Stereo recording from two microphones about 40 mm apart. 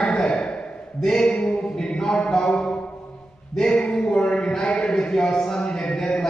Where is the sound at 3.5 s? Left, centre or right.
Left.